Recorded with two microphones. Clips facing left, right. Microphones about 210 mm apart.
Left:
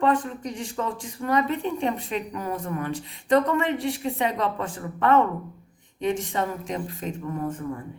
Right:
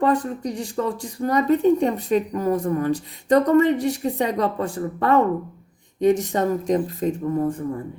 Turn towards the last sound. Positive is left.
turn(degrees=-35)  # may be behind; listen again after turning